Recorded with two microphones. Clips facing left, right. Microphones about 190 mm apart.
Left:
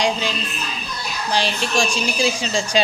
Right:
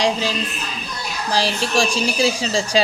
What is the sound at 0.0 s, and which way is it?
A woman's voice, 35° right (ahead or behind).